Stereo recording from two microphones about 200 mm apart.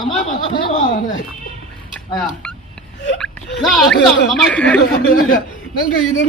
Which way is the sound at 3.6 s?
Centre (ahead or behind).